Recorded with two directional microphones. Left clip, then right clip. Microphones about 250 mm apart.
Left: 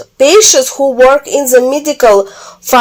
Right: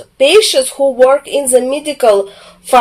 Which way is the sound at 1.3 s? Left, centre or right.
Left.